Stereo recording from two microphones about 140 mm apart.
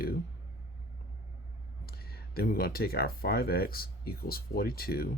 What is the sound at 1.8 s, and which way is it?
Speech, 90° left.